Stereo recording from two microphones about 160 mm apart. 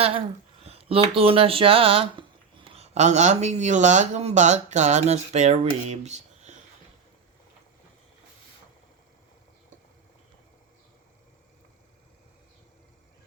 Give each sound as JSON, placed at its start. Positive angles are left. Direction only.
{"t": 0.6, "sound": "speech", "side_deg": -35}